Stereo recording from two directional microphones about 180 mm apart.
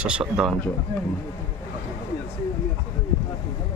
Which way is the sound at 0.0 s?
5° right (ahead or behind).